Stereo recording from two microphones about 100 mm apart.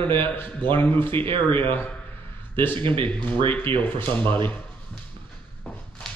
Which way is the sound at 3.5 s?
20° left (ahead or behind).